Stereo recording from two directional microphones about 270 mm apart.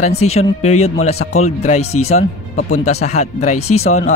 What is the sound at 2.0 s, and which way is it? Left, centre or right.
Speech, left.